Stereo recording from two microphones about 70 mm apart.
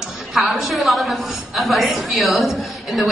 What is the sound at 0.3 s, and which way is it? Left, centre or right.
A woman's voice, centre.